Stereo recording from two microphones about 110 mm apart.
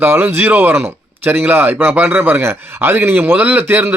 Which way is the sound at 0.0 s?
20° right (ahead or behind).